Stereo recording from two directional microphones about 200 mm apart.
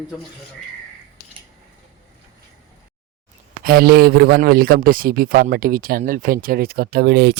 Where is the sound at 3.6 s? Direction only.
50° right (ahead or behind).